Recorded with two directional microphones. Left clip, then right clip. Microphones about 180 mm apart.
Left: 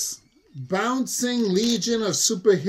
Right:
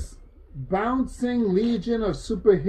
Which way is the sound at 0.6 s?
20° left (ahead or behind).